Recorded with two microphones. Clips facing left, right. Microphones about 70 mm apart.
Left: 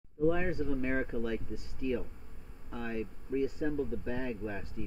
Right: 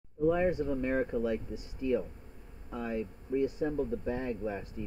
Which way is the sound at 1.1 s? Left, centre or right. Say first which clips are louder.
Right 3 dB; centre.